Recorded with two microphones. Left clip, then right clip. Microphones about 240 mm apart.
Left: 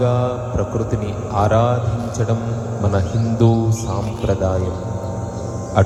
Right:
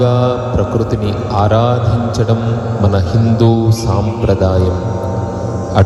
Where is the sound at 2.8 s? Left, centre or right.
Right.